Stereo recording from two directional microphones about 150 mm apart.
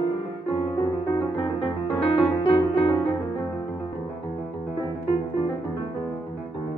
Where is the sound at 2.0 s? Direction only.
35° left (ahead or behind).